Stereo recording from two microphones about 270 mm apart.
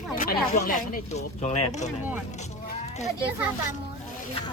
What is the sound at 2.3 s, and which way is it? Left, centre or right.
Bleat, left.